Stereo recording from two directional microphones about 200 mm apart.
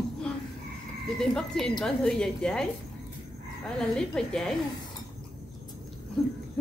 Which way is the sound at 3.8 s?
5° left (ahead or behind).